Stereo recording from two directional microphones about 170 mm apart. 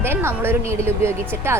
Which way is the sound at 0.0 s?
15° right (ahead or behind).